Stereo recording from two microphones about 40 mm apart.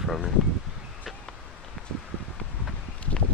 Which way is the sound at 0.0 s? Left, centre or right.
Centre.